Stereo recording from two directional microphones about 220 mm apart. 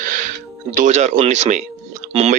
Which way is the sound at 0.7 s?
35° right (ahead or behind).